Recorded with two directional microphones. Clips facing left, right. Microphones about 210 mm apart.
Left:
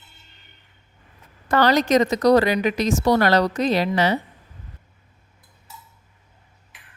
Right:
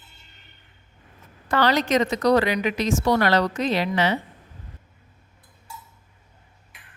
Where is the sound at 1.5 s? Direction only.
45° left (ahead or behind).